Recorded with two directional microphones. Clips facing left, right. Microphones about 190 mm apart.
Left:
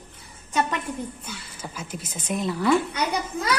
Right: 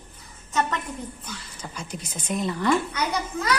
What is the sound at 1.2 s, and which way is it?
Speech, 5° left (ahead or behind).